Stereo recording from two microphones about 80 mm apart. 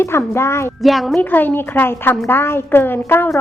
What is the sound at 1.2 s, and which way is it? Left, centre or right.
A woman's voice, left.